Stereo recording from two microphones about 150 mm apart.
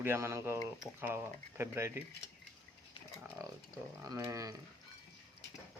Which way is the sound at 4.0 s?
25° right (ahead or behind).